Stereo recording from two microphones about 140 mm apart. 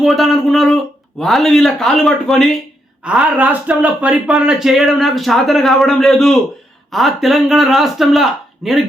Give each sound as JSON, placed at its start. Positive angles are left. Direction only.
{"t": 0.0, "sound": "speech", "side_deg": 0}